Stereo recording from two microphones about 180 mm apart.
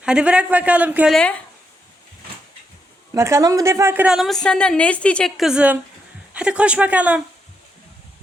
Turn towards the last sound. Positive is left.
turn(degrees=-5)  # may be behind; listen again after turning